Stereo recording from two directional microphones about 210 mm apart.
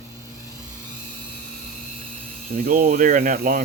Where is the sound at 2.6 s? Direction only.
40° right (ahead or behind).